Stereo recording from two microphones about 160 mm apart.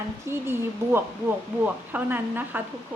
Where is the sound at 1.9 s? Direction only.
10° right (ahead or behind).